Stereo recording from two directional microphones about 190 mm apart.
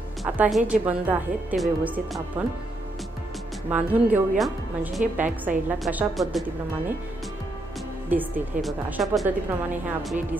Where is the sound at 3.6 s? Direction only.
10° right (ahead or behind).